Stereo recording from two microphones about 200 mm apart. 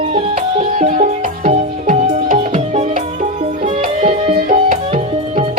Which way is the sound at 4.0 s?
30° right (ahead or behind).